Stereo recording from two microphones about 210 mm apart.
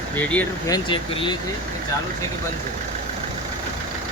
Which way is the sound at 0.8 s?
25° left (ahead or behind).